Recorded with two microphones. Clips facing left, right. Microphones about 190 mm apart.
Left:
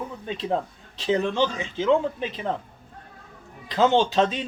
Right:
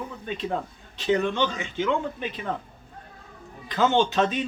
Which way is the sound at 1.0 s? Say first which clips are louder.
Left 1 dB; 30° left (ahead or behind).